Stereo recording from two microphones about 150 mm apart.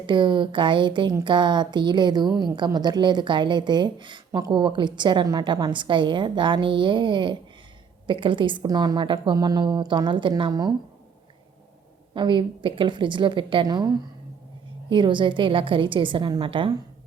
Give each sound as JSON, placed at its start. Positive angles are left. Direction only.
{"t": 0.0, "sound": "a woman's voice", "side_deg": -30}
{"t": 4.3, "sound": "speech", "side_deg": -20}
{"t": 4.5, "sound": "a woman's voice", "side_deg": -30}
{"t": 12.1, "sound": "a woman's voice", "side_deg": -30}